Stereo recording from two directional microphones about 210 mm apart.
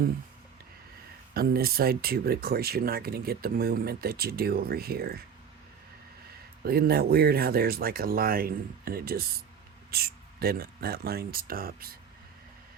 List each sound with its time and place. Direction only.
1.3 s speech: 45° right (ahead or behind)
6.7 s speech: 45° right (ahead or behind)